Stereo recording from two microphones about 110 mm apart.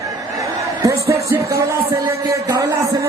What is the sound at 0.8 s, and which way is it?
Music, 30° right (ahead or behind).